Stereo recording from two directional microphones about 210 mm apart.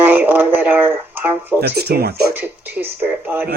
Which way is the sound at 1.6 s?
50° right (ahead or behind).